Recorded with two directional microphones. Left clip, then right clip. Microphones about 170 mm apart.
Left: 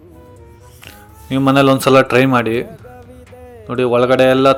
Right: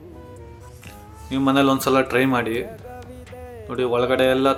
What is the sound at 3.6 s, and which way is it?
Speech, 40° left (ahead or behind).